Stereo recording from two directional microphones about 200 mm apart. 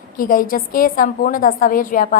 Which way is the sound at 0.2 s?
45° left (ahead or behind).